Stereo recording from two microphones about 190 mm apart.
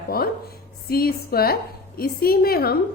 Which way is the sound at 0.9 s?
50° left (ahead or behind).